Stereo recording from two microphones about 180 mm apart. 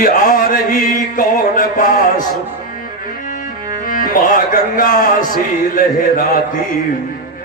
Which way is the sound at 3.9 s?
50° left (ahead or behind).